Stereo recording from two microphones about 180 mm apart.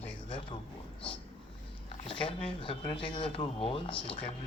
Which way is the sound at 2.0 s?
30° left (ahead or behind).